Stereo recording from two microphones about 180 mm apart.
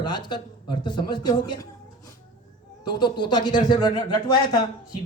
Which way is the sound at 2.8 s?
25° left (ahead or behind).